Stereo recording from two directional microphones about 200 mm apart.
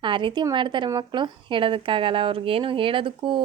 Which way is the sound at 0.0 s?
25° right (ahead or behind).